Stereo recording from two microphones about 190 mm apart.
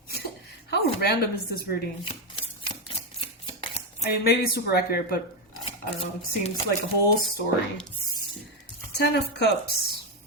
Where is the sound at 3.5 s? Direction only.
35° left (ahead or behind).